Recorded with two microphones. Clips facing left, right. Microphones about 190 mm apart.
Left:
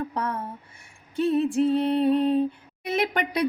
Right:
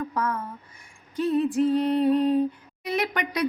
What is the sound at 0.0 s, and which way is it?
Speech, 30° left (ahead or behind).